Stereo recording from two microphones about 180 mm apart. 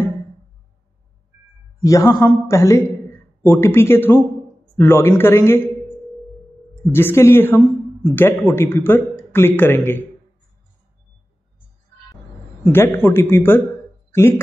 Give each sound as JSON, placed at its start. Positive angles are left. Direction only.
{"t": 1.8, "sound": "a man's voice", "side_deg": 20}
{"t": 6.9, "sound": "a man's voice", "side_deg": 15}
{"t": 12.7, "sound": "a man's voice", "side_deg": 15}